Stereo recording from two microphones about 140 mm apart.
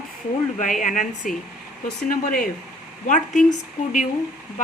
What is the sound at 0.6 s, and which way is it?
Speech, 70° left (ahead or behind).